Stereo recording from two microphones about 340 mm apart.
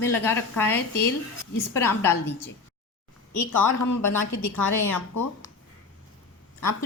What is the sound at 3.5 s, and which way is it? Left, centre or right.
A woman's voice, left.